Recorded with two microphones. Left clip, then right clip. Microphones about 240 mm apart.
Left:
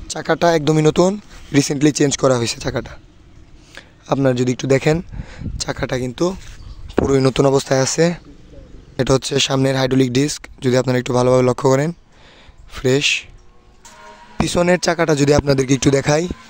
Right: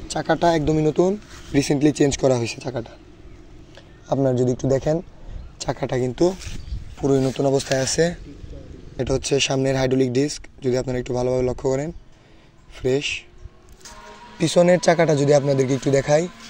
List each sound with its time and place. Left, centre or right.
0.1 s speech: left
1.5 s a man's voice: left
7.0 s speech: left
14.4 s speech: left